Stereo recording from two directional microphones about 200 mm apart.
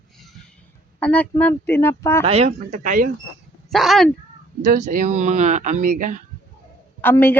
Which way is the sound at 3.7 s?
Centre (ahead or behind).